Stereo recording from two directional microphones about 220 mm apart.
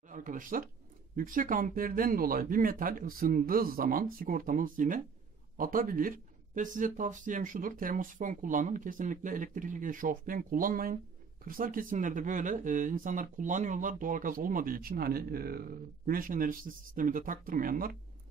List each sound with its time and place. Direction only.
0.1 s speech: 35° right (ahead or behind)